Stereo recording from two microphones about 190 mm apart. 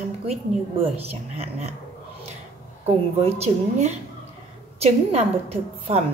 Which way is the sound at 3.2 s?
35° right (ahead or behind).